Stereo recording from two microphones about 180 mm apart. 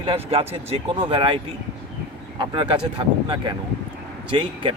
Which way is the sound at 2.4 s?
25° right (ahead or behind).